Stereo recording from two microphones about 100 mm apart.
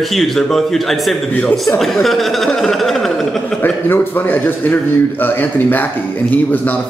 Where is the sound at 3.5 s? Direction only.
20° left (ahead or behind).